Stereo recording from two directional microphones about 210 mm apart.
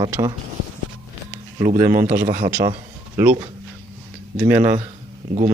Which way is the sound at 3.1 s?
10° right (ahead or behind).